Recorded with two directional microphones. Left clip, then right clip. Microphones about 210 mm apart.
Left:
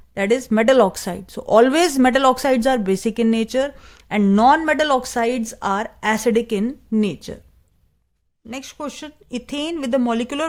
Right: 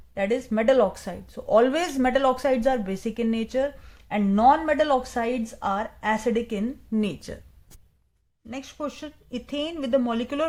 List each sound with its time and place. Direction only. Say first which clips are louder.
0.1 s speech: left 6 dB; 50° left (ahead or behind); by 7.3 s 35° left (ahead or behind)
8.4 s speech: left 3 dB; 40° left (ahead or behind)